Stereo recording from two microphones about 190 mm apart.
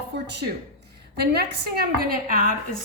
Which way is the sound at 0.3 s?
65° right (ahead or behind).